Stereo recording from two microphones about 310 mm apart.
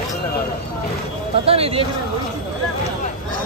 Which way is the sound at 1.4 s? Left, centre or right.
Centre.